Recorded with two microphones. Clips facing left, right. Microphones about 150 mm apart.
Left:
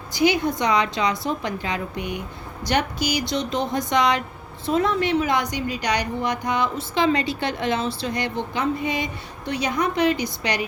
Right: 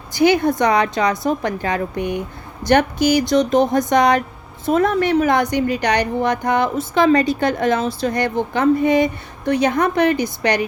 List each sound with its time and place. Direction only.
0.1 s a woman's voice: 55° right (ahead or behind)